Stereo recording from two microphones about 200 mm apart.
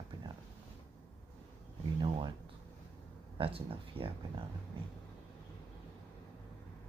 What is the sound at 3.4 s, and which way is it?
Speech, 25° right (ahead or behind).